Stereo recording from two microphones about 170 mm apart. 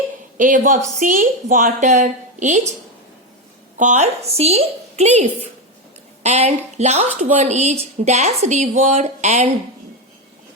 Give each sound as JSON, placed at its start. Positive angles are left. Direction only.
{"t": 0.3, "sound": "a woman's voice", "side_deg": -50}
{"t": 3.8, "sound": "a woman's voice", "side_deg": -45}